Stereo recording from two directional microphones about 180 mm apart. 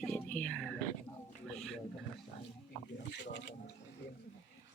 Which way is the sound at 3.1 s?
75° left (ahead or behind).